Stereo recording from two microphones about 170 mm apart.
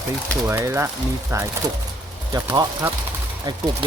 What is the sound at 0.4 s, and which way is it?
Speech, 15° right (ahead or behind).